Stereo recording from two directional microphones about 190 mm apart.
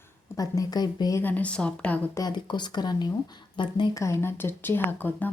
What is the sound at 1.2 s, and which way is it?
Speech, 10° left (ahead or behind).